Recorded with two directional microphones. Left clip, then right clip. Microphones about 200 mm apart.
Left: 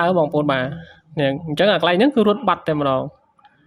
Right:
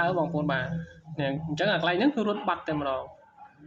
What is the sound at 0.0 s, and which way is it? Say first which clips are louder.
Speech: left 9 dB; 50° left (ahead or behind).